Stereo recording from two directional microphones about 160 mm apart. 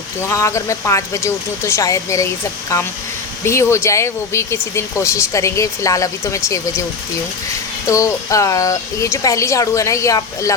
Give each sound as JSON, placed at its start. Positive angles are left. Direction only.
{"t": 0.2, "sound": "speech", "side_deg": 20}
{"t": 7.9, "sound": "speech", "side_deg": 20}